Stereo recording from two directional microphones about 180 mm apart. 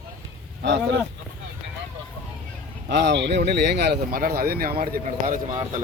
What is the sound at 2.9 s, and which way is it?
Speech, 70° right (ahead or behind).